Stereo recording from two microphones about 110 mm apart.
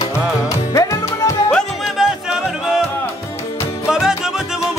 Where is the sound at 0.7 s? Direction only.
30° left (ahead or behind).